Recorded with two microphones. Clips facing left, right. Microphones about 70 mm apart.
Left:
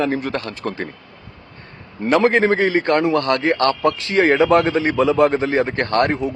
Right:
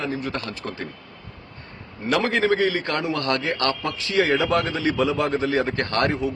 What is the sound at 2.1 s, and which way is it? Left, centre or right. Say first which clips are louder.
Speech: left 6 dB; left.